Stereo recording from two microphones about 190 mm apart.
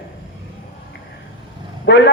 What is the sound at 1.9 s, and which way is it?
Speech, 65° left (ahead or behind).